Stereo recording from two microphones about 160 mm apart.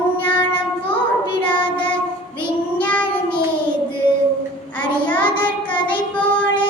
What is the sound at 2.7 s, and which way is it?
Child singing, 10° left (ahead or behind).